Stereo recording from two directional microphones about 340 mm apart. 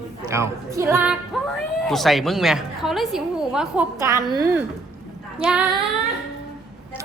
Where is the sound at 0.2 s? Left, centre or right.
Centre.